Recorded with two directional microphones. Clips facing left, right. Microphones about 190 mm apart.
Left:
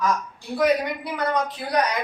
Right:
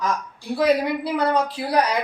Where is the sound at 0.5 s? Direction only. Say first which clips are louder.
Right 2 dB; 30° right (ahead or behind).